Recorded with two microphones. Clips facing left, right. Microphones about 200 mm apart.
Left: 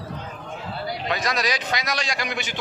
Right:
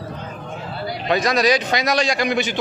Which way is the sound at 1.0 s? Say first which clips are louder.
Right 9 dB; 30° right (ahead or behind).